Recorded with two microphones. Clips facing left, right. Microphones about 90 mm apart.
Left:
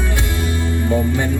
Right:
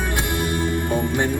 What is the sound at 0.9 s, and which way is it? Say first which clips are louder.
Music: left 5 dB; 20° right (ahead or behind).